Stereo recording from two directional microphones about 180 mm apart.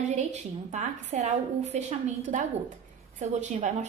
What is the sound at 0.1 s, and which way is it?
A woman's voice, 40° right (ahead or behind).